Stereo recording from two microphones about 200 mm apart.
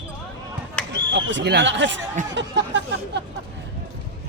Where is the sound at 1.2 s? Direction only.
60° right (ahead or behind).